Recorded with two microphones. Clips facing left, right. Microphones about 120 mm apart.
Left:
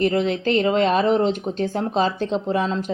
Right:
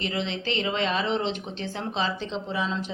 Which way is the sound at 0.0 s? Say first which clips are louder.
Left 10 dB; 50° left (ahead or behind).